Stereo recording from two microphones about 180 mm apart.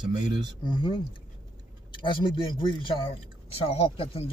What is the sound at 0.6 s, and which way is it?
Speech, 25° left (ahead or behind).